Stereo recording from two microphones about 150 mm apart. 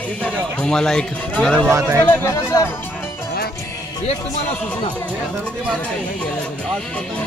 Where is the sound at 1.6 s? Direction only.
20° right (ahead or behind).